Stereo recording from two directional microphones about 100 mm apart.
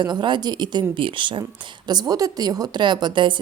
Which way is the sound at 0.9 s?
55° right (ahead or behind).